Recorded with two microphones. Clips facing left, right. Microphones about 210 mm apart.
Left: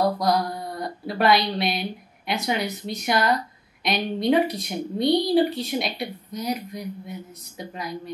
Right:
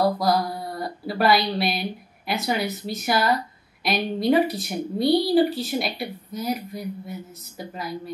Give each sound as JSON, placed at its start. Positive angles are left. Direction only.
{"t": 0.0, "sound": "a woman's voice", "side_deg": -5}